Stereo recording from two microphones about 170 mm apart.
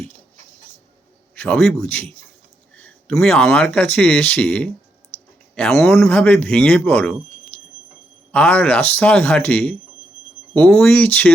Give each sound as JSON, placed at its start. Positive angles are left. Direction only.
{"t": 1.4, "sound": "speech", "side_deg": 5}
{"t": 5.8, "sound": "speech", "side_deg": 15}